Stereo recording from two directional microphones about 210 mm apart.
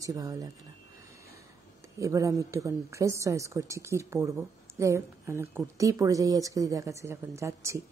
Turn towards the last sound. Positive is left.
turn(degrees=-15)  # may be behind; listen again after turning